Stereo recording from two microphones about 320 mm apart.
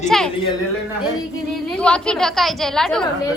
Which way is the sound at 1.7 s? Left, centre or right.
Centre.